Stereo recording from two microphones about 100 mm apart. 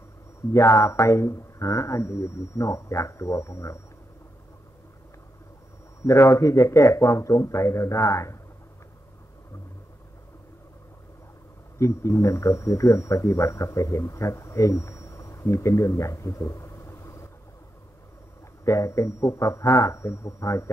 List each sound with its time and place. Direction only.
0.5 s speech: 30° left (ahead or behind)
6.0 s speech: 30° left (ahead or behind)
11.8 s speech: 30° left (ahead or behind)
18.7 s speech: 30° left (ahead or behind)